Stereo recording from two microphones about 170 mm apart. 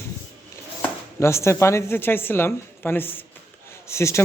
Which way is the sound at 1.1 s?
15° left (ahead or behind).